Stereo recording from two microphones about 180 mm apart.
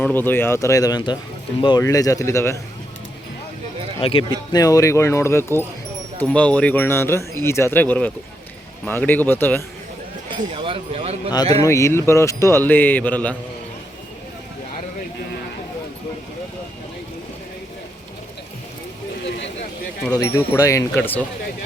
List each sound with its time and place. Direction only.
0.0 s speech: 10° left (ahead or behind)
4.0 s speech: 30° left (ahead or behind); by 9.6 s 10° left (ahead or behind)
10.5 s speech: 30° right (ahead or behind)
11.3 s speech: 20° left (ahead or behind)
20.1 s speech: 20° left (ahead or behind)